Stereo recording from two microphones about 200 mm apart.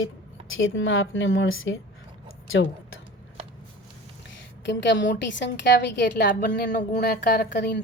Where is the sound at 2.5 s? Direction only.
80° left.